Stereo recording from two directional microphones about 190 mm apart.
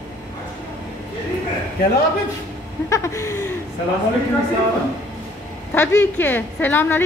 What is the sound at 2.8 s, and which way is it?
Speech, 15° left (ahead or behind).